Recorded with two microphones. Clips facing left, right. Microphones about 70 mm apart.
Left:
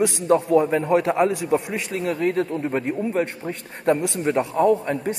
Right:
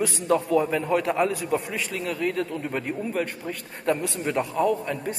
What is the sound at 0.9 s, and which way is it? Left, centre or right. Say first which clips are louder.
A man's voice: left 4 dB; left.